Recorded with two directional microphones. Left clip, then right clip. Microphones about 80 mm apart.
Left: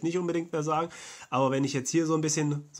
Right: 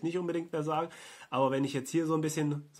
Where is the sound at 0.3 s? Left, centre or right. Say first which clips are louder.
Left 4 dB; left.